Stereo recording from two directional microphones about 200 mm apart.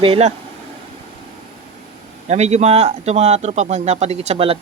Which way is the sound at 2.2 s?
35° right (ahead or behind).